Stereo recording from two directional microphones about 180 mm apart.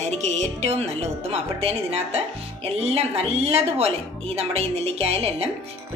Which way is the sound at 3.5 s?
35° right (ahead or behind).